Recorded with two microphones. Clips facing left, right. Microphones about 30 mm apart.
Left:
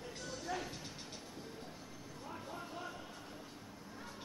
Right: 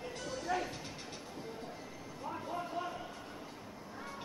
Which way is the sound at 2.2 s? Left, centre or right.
Right.